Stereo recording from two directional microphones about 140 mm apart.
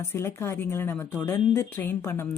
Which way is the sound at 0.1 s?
20° left (ahead or behind).